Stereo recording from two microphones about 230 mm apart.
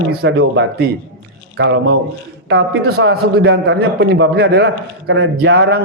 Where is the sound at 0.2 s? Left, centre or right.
Right.